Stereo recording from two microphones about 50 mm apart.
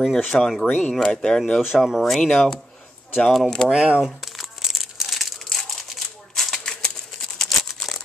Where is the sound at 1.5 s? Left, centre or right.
Centre.